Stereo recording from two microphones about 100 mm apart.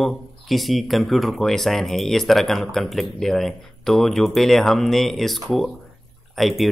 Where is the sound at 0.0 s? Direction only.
Centre (ahead or behind).